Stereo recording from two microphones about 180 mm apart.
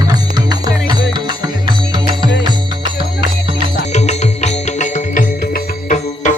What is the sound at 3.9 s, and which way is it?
Music, 40° left (ahead or behind).